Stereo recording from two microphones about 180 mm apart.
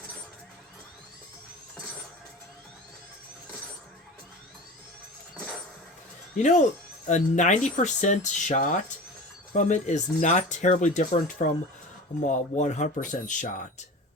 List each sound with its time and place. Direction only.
6.3 s speech: 40° left (ahead or behind)